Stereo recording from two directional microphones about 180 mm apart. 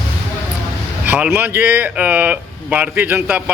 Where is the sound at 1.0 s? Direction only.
10° right (ahead or behind).